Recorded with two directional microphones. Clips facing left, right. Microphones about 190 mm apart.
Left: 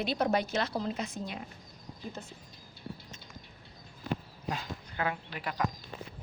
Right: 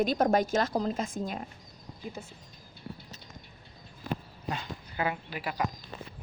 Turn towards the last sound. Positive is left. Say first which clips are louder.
# right 2 dB
turn(degrees=-10)  # may be behind; listen again after turning